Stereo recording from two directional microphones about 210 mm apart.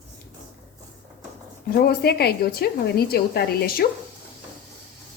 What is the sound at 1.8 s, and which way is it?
Speech, 50° left (ahead or behind).